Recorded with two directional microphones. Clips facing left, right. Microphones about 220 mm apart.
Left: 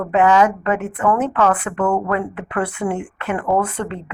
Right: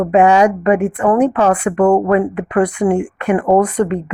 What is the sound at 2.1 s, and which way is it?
A woman's voice, 20° right (ahead or behind).